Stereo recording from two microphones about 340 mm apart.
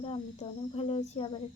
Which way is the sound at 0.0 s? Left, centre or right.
Centre.